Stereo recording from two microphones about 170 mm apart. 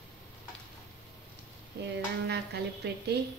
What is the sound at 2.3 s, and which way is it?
Speech, 75° right (ahead or behind).